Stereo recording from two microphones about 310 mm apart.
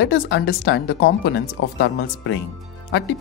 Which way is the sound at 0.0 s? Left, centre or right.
Left.